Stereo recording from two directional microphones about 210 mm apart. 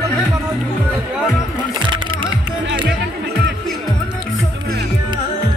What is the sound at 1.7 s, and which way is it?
Music, 20° right (ahead or behind).